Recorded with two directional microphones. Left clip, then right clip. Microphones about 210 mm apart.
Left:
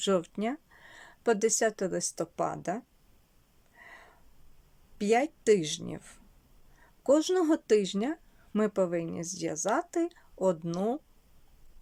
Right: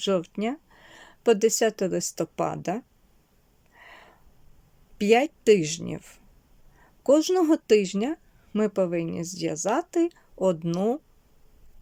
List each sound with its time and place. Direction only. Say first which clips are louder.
0.0 s speech: right 3 dB; centre (ahead or behind)
3.8 s snort: right 3 dB; 5° right (ahead or behind)
4.9 s speech: right 6 dB; 10° right (ahead or behind)